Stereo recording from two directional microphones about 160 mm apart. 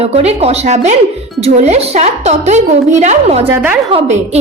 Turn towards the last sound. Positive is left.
turn(degrees=-40)  # may be behind; listen again after turning